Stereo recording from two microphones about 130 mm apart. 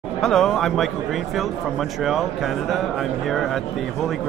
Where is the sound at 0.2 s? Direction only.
5° left (ahead or behind).